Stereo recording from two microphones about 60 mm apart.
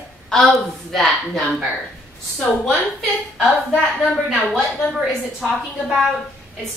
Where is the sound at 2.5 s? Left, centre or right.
Centre.